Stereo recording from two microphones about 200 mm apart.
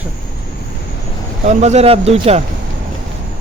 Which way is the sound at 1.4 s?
35° right (ahead or behind).